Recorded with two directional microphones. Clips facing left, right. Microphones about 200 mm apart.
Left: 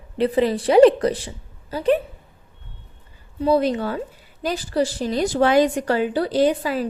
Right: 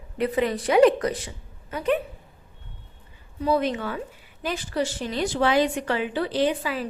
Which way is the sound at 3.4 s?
35° left (ahead or behind).